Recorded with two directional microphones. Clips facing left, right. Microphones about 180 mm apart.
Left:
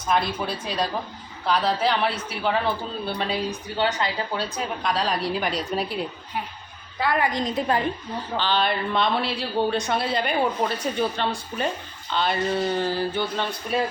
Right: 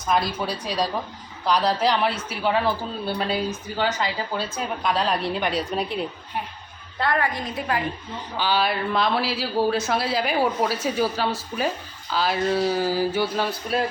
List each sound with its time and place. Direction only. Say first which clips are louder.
0.1 s a woman's voice: right 1 dB; centre (ahead or behind)
7.0 s a woman's voice: even; 5° left (ahead or behind)
7.3 s a woman's voice: left 3 dB; 20° left (ahead or behind)
8.4 s a woman's voice: right 1 dB; 5° right (ahead or behind)